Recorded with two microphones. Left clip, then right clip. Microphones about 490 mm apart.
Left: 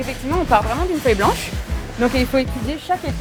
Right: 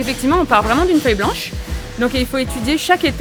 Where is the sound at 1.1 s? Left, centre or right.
Right.